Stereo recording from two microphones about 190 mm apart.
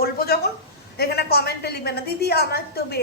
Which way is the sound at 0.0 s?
55° left (ahead or behind).